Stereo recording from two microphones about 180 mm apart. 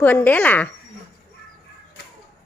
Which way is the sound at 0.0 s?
10° left (ahead or behind).